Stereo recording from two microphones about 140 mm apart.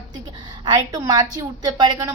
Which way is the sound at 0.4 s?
30° right (ahead or behind).